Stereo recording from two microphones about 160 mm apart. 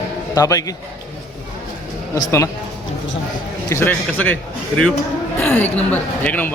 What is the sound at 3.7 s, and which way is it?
Speech, 15° left (ahead or behind).